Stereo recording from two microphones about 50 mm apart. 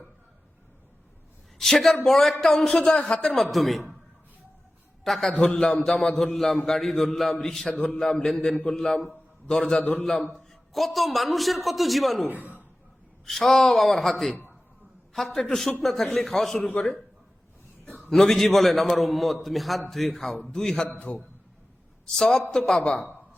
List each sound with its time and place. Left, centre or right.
1.5 s a man's voice: centre
3.4 s a man's voice: centre
5.0 s a man's voice: centre
12.3 s speech: right
13.2 s a man's voice: centre
18.1 s a man's voice: centre
21.1 s a man's voice: left
22.1 s a man's voice: centre